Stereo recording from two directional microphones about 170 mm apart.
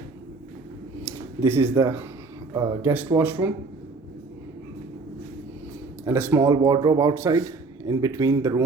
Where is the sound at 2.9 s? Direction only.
10° right (ahead or behind).